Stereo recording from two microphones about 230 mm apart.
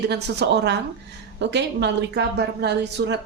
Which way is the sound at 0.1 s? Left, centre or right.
Right.